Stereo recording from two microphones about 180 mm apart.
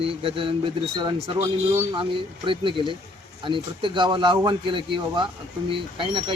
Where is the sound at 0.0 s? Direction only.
30° right (ahead or behind).